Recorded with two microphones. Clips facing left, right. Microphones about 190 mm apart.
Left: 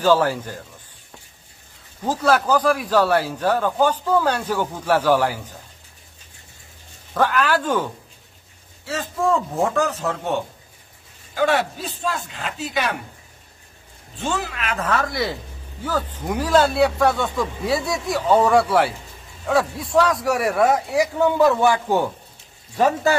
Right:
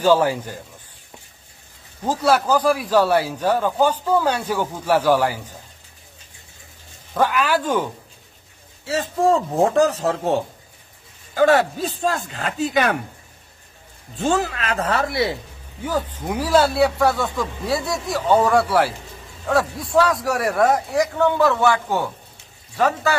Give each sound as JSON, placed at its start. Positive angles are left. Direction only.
{"t": 0.0, "sound": "a man's voice", "side_deg": -15}
{"t": 2.0, "sound": "a man's voice", "side_deg": -10}
{"t": 7.2, "sound": "a man's voice", "side_deg": -10}
{"t": 8.8, "sound": "speech", "side_deg": -30}
{"t": 11.3, "sound": "speech", "side_deg": -45}
{"t": 14.1, "sound": "speech", "side_deg": -40}
{"t": 15.8, "sound": "a man's voice", "side_deg": -15}